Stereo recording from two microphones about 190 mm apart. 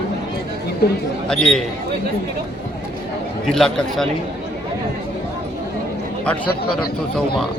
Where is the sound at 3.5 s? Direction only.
Centre (ahead or behind).